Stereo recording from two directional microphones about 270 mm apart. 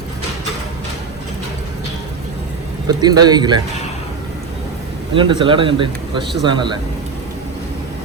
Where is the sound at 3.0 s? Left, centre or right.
Centre.